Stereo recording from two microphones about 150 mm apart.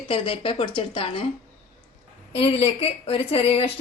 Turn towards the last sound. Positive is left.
turn(degrees=40)  # may be behind; listen again after turning